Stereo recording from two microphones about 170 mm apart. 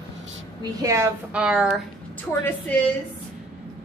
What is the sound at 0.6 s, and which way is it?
Speech, 20° right (ahead or behind).